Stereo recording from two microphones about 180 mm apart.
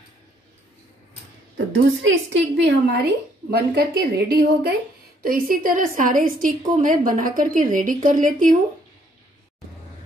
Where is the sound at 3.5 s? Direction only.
60° right (ahead or behind).